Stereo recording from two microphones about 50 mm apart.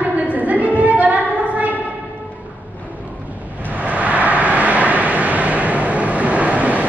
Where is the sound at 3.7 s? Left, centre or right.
Right.